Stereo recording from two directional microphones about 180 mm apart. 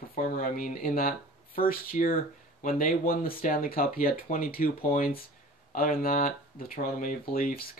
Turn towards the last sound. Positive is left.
turn(degrees=55)  # may be behind; listen again after turning